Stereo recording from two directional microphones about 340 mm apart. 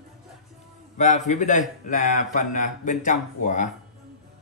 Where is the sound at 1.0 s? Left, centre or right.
Left.